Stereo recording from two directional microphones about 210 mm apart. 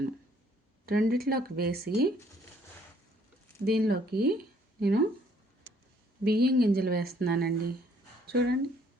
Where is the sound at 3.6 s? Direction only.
50° right (ahead or behind).